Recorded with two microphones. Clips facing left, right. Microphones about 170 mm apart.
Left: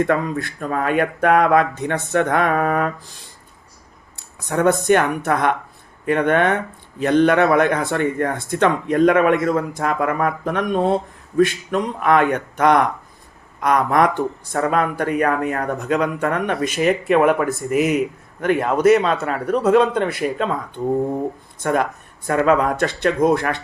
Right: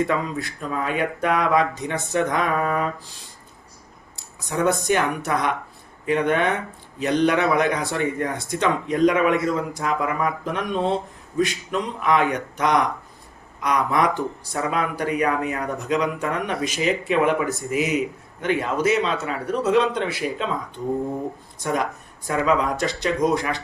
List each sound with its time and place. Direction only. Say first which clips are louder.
0.0 s speech: left 4 dB; 55° left (ahead or behind)
4.4 s speech: left 4 dB; 55° left (ahead or behind)
21.6 s speech: left 4 dB; 55° left (ahead or behind)